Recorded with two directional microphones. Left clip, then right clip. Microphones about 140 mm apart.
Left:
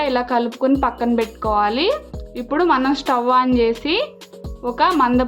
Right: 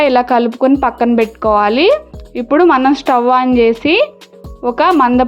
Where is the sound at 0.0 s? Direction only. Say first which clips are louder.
Right 8 dB; 55° right (ahead or behind).